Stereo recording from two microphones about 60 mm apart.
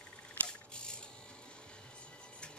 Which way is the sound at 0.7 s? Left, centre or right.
Centre.